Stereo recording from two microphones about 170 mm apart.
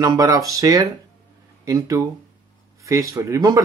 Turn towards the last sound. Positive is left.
turn(degrees=-20)  # may be behind; listen again after turning